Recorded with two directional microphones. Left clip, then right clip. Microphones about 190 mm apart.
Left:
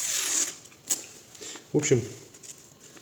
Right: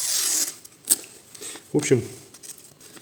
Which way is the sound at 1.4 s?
35° right (ahead or behind).